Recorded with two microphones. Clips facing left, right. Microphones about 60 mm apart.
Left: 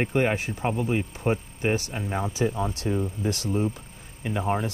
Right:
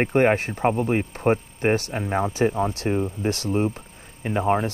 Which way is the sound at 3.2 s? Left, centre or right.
Right.